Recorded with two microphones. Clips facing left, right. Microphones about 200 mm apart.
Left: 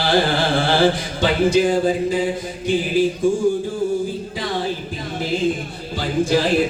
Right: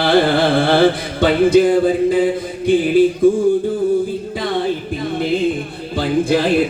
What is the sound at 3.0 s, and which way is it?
Music, 55° right (ahead or behind).